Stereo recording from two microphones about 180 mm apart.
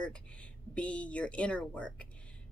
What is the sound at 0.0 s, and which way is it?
Speech, 5° left (ahead or behind).